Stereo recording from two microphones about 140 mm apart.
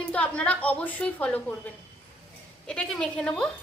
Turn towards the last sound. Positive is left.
turn(degrees=10)  # may be behind; listen again after turning